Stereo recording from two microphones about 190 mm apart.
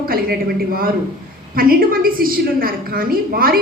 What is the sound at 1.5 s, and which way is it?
A woman's voice, 50° right (ahead or behind).